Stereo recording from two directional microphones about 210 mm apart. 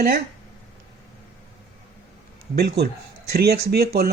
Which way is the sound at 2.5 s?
50° right (ahead or behind).